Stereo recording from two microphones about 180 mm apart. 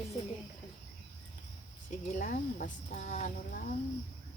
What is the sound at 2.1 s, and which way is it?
Speech, 50° left (ahead or behind).